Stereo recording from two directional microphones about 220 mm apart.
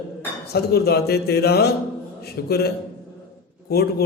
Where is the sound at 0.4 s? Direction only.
45° left (ahead or behind).